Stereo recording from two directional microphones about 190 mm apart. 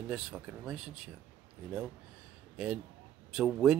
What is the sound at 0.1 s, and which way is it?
Speech, 5° right (ahead or behind).